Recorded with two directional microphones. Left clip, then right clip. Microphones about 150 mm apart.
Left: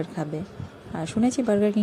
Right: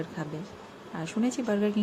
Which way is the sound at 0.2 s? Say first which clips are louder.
Left 6 dB; 35° left (ahead or behind).